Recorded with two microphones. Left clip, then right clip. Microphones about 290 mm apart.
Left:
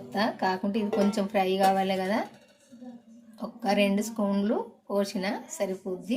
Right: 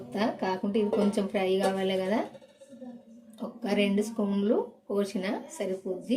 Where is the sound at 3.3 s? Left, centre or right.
Left.